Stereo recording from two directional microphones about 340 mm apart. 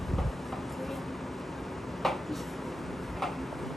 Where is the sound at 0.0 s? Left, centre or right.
Centre.